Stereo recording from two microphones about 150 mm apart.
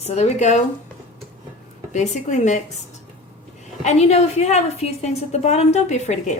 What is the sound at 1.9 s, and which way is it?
Speech, 50° left (ahead or behind).